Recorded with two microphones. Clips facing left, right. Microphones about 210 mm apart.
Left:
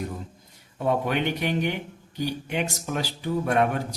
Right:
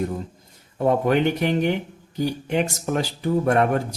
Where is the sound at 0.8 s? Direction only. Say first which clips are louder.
Right 6 dB; 50° right (ahead or behind).